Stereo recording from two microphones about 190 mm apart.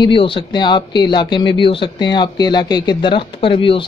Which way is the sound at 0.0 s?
25° left (ahead or behind).